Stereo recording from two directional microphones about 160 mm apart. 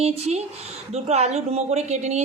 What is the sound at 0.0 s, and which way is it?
A woman's voice, 40° right (ahead or behind).